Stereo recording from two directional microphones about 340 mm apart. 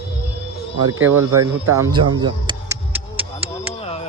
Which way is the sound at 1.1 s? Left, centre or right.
Centre.